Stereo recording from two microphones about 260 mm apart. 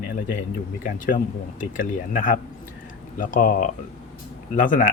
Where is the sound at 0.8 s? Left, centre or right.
Left.